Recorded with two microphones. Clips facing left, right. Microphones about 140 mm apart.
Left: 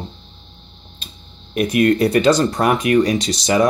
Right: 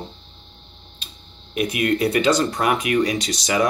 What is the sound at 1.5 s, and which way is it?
Speech, 45° left (ahead or behind).